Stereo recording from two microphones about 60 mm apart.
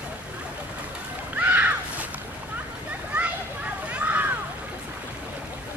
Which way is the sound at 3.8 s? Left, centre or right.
Right.